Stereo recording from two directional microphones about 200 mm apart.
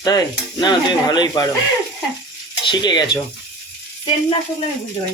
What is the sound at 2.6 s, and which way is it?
Sizzle, 20° left (ahead or behind).